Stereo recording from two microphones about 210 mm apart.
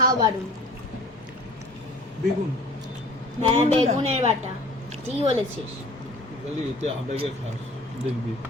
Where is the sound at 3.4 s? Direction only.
30° right (ahead or behind).